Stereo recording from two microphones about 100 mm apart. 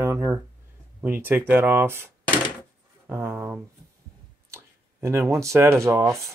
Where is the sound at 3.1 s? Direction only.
25° right (ahead or behind).